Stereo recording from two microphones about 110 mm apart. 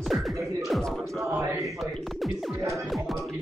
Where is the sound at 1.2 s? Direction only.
25° right (ahead or behind).